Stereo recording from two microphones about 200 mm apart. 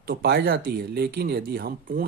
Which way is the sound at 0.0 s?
50° right (ahead or behind).